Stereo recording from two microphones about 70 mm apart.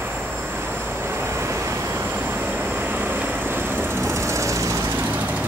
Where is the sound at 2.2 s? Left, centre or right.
Right.